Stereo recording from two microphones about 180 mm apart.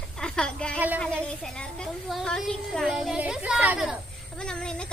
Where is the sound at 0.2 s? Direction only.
5° left (ahead or behind).